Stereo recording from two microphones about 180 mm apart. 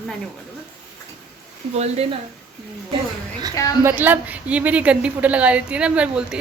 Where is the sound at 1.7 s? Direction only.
35° right (ahead or behind).